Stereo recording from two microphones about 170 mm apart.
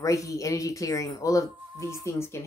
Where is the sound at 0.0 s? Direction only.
20° left (ahead or behind).